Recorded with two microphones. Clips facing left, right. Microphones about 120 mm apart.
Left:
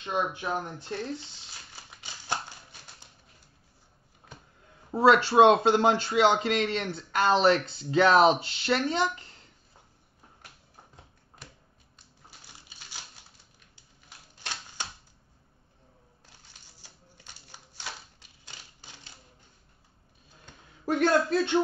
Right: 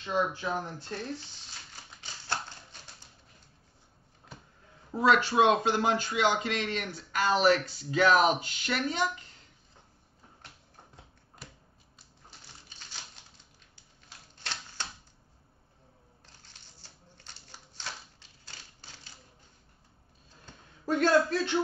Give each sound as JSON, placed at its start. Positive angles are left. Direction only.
{"t": 0.0, "sound": "speech", "side_deg": 20}
{"t": 4.9, "sound": "speech", "side_deg": 30}
{"t": 12.3, "sound": "a sound", "side_deg": 10}
{"t": 14.4, "sound": "typewriter", "side_deg": 15}
{"t": 16.8, "sound": "a sound", "side_deg": 10}
{"t": 20.8, "sound": "a man's voice", "side_deg": 20}